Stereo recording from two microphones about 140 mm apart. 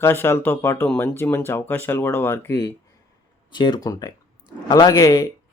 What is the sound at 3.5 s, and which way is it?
A man's voice, 30° left (ahead or behind).